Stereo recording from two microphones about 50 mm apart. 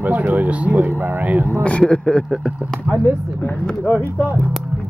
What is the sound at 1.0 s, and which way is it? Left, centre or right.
Speech, right.